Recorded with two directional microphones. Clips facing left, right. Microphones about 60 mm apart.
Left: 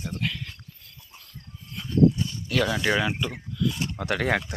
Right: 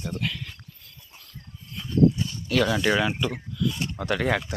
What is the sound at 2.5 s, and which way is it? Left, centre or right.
Speech, centre.